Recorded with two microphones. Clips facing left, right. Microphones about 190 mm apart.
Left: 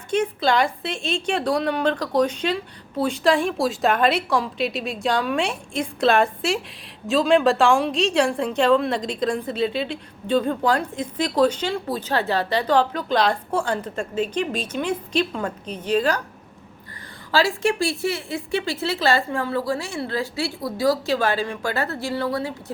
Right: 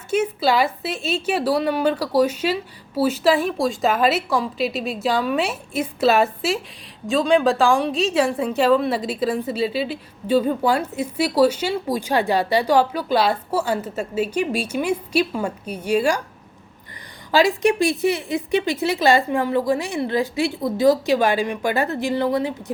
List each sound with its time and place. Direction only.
0.1 s a woman's voice: 5° right (ahead or behind)
17.3 s speech: 15° right (ahead or behind)